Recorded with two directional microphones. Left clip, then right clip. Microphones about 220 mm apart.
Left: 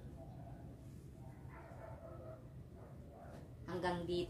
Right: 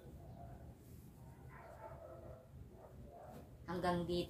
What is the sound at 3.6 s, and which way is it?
Speech, 15° left (ahead or behind).